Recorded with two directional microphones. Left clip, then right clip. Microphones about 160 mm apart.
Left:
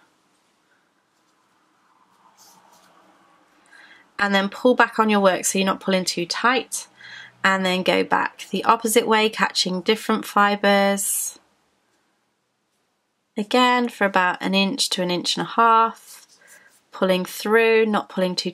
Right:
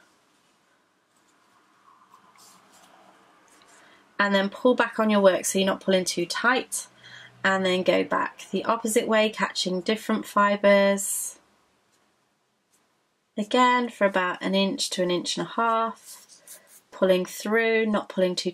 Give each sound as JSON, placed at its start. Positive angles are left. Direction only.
{"t": 4.3, "sound": "speech", "side_deg": 35}
{"t": 13.3, "sound": "speech", "side_deg": 35}
{"t": 17.0, "sound": "speech", "side_deg": 35}